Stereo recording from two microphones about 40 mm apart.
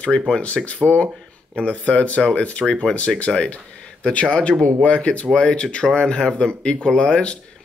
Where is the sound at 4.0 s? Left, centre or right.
Left.